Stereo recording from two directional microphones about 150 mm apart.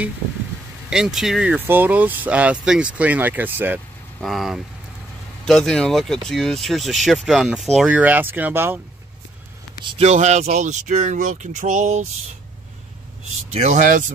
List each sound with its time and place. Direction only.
0.8 s speech: 5° right (ahead or behind)
4.2 s speech: centre (ahead or behind)
9.8 s speech: 45° right (ahead or behind)
13.5 s speech: 50° right (ahead or behind)